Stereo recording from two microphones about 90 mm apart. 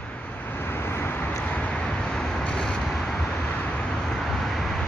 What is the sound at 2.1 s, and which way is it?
Vehicle, 10° left (ahead or behind).